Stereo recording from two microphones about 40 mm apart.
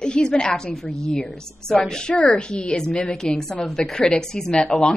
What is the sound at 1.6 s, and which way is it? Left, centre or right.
Speech, centre.